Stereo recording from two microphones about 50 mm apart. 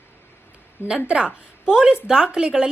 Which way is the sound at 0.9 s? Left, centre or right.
Right.